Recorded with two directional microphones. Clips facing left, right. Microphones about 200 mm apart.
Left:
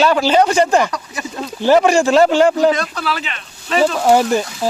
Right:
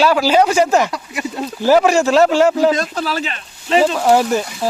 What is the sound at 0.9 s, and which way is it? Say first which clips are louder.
Speech: right 2 dB; 15° right (ahead or behind).